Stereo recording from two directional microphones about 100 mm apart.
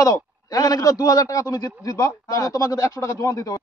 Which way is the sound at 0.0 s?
35° left (ahead or behind).